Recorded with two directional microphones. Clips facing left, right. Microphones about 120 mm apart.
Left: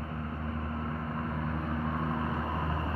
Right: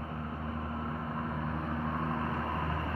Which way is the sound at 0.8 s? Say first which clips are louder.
Left 1 dB; 10° right (ahead or behind).